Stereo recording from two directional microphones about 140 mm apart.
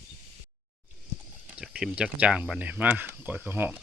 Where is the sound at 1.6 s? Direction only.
5° right (ahead or behind).